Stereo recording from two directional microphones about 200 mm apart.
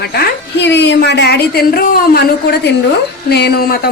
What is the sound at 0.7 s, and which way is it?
A woman's voice, 60° left (ahead or behind).